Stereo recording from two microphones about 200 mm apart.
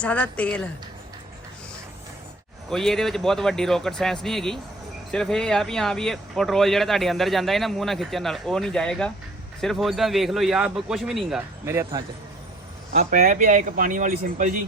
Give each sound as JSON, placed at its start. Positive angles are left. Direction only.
{"t": 0.0, "sound": "speech", "side_deg": 5}
{"t": 2.6, "sound": "speech", "side_deg": 0}
{"t": 11.6, "sound": "speech", "side_deg": -15}
{"t": 13.0, "sound": "speech", "side_deg": -50}